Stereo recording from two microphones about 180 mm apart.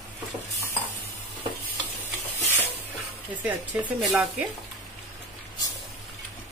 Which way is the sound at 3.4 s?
10° right (ahead or behind).